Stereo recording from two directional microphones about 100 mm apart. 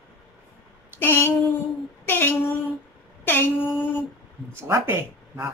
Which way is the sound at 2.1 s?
20° left (ahead or behind).